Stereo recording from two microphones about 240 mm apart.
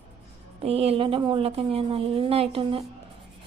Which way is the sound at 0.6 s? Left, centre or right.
Right.